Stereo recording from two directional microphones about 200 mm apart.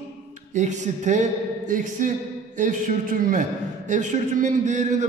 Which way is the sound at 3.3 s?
40° right (ahead or behind).